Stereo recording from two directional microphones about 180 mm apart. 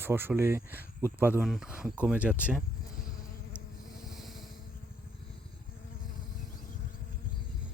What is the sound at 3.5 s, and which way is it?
Insect, 15° left (ahead or behind).